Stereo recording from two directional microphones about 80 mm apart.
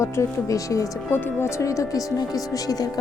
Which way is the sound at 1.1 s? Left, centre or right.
Left.